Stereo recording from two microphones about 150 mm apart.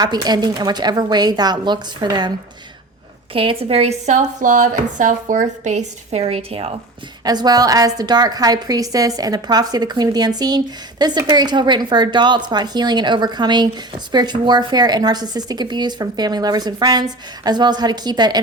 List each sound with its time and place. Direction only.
0.0 s a woman's voice: 25° right (ahead or behind)
3.3 s speech: 40° right (ahead or behind)
7.3 s a woman's voice: 25° right (ahead or behind)